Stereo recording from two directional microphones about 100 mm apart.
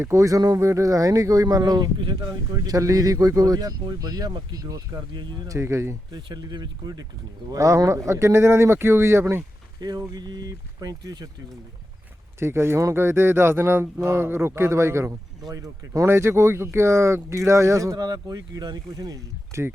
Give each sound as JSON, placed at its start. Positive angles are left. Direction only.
{"t": 0.0, "sound": "speech", "side_deg": -30}
{"t": 2.6, "sound": "speech", "side_deg": -35}
{"t": 5.5, "sound": "speech", "side_deg": -30}
{"t": 6.1, "sound": "speech", "side_deg": -50}
{"t": 10.1, "sound": "speech", "side_deg": -40}
{"t": 12.4, "sound": "speech", "side_deg": -25}